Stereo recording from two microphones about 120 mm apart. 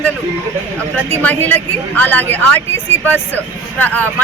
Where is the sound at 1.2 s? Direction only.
15° left (ahead or behind).